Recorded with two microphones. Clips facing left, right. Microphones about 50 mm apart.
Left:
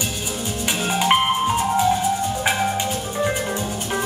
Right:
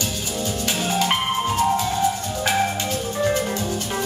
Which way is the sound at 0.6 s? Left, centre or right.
Left.